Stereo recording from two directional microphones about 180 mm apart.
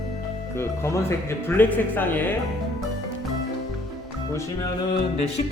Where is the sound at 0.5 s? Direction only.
15° left (ahead or behind).